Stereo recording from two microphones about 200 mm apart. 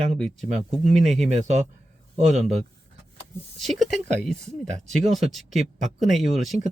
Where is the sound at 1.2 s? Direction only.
35° right (ahead or behind).